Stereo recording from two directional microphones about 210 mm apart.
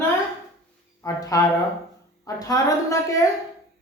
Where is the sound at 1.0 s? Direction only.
15° left (ahead or behind).